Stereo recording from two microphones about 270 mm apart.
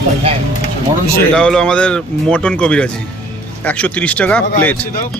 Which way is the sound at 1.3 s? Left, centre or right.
Centre.